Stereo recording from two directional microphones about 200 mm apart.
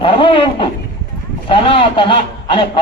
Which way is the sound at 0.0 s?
25° left (ahead or behind).